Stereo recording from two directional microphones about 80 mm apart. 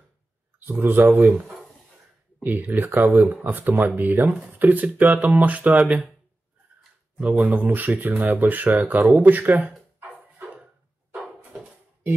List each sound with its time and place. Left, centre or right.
0.7 s speech: right
2.4 s speech: right
7.2 s speech: centre